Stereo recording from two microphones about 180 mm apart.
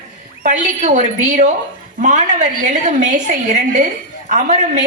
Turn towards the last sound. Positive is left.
turn(degrees=-45)  # may be behind; listen again after turning